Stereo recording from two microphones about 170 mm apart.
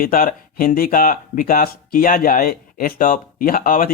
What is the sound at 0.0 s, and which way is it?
Speech, 55° left (ahead or behind).